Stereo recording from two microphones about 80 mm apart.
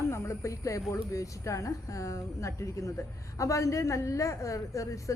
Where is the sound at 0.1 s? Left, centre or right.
Left.